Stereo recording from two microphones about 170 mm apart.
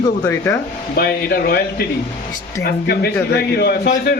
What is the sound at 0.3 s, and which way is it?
Speech, 15° left (ahead or behind).